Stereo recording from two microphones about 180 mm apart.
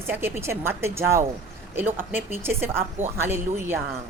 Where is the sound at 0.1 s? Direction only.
10° right (ahead or behind).